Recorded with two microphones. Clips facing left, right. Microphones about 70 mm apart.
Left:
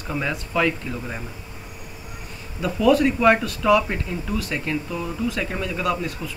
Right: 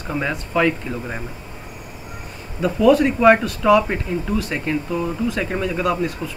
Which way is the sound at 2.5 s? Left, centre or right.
Centre.